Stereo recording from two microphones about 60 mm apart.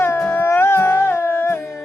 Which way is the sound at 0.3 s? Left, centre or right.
Left.